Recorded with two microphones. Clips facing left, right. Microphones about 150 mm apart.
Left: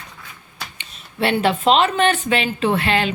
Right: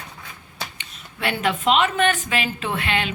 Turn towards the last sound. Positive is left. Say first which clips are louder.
# left 6 dB
turn(degrees=35)  # may be behind; listen again after turning